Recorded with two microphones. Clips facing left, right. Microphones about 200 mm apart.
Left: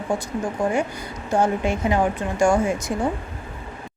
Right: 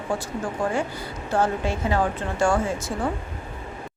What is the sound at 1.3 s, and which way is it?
Speech, 15° left (ahead or behind).